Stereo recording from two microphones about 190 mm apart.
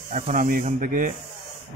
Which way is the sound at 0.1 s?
45° right (ahead or behind).